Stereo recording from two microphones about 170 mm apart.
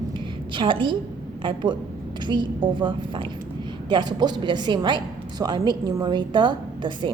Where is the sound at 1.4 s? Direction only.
30° right (ahead or behind).